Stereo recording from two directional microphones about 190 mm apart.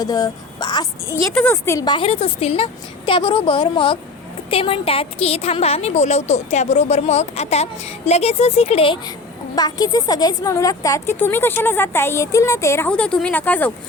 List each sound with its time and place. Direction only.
0.0 s a woman's voice: 20° left (ahead or behind)